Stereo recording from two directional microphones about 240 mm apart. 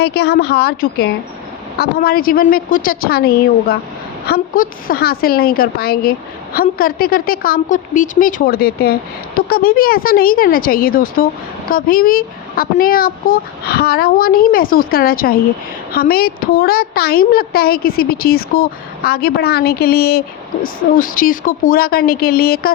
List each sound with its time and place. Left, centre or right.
0.0 s a woman's voice: left